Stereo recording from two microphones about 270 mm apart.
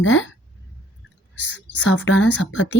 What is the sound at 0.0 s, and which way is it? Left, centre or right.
Speech, left.